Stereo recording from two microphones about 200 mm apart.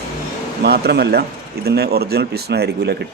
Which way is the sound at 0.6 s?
55° right (ahead or behind).